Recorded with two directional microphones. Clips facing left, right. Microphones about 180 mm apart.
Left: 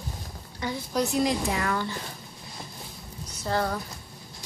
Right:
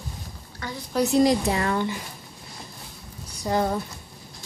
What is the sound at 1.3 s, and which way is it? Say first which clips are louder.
Speech: right 5 dB; 30° right (ahead or behind).